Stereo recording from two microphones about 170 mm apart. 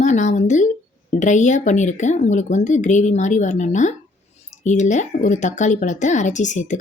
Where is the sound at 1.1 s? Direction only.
45° left (ahead or behind).